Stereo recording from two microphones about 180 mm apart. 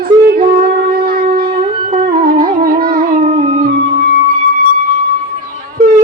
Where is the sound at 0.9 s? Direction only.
55° right (ahead or behind).